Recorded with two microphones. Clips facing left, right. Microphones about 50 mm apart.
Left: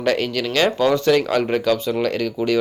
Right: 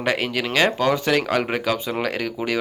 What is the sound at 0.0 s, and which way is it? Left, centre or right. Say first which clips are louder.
Speech: left 2 dB; centre.